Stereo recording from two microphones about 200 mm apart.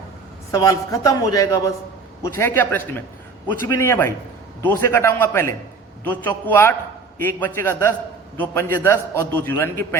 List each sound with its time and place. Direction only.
0.5 s a man's voice: 15° left (ahead or behind)